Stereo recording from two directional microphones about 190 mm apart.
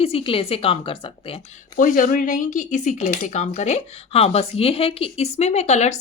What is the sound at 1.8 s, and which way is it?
Speech, 45° left (ahead or behind).